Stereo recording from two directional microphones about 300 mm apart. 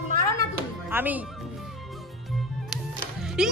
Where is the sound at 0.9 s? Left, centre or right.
Centre.